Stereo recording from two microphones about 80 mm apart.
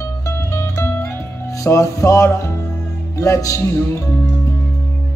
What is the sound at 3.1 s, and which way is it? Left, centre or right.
Speech, left.